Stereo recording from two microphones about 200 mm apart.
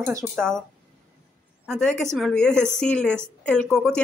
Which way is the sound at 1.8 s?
Centre (ahead or behind).